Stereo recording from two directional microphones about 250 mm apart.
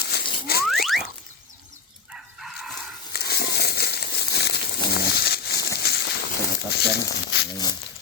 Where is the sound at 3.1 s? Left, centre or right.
Left.